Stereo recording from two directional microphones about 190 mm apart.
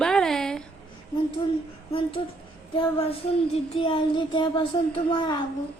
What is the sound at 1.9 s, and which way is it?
Child singing, 30° left (ahead or behind).